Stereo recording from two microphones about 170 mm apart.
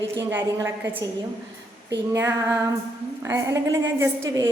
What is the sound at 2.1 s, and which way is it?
A woman's voice, 20° right (ahead or behind).